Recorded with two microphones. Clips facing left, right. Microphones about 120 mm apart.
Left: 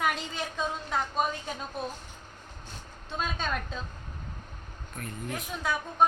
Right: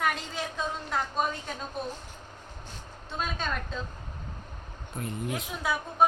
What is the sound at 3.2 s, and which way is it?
Speech, centre (ahead or behind).